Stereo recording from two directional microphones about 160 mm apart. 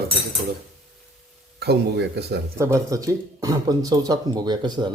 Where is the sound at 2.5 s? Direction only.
20° right (ahead or behind).